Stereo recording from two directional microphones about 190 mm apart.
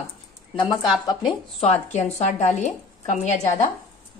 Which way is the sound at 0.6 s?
25° left (ahead or behind).